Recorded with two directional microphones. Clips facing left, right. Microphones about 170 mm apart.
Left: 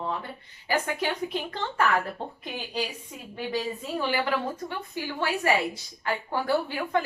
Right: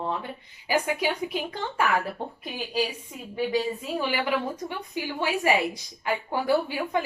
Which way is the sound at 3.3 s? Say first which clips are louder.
Right 4 dB; 10° right (ahead or behind).